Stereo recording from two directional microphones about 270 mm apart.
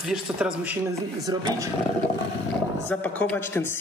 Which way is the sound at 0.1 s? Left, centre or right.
Centre.